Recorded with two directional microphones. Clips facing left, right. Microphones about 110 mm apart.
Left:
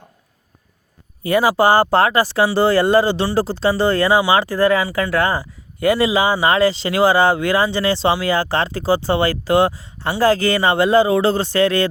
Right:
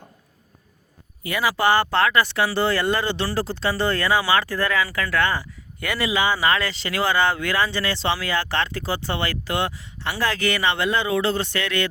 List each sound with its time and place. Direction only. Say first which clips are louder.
1.2 s speech: left 7 dB; 35° left (ahead or behind)